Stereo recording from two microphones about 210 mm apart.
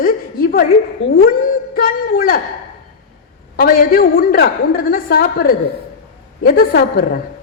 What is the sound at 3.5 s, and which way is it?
A woman's voice, 45° left (ahead or behind).